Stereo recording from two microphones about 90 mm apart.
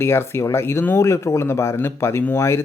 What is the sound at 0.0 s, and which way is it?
Speech, 25° left (ahead or behind).